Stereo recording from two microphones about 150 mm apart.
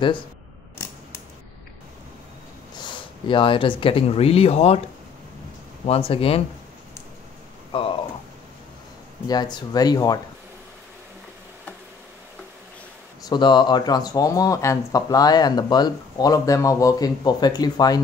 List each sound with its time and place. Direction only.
2.8 s speech: 35° left (ahead or behind)
5.9 s speech: 40° left (ahead or behind)
7.7 s speech: 35° left (ahead or behind)
9.3 s speech: 30° left (ahead or behind)
13.3 s speech: 30° left (ahead or behind)